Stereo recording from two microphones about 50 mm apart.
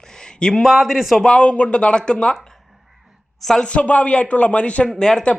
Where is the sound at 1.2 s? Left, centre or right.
Left.